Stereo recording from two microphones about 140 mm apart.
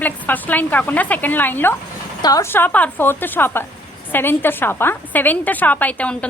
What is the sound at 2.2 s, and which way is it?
Speech, 25° left (ahead or behind).